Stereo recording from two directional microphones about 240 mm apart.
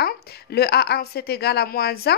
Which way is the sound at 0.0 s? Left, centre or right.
Left.